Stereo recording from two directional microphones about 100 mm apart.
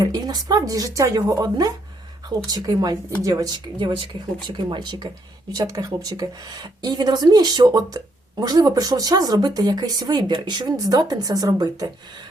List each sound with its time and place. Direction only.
0.0 s speech: 40° right (ahead or behind)
2.5 s speech: 40° right (ahead or behind)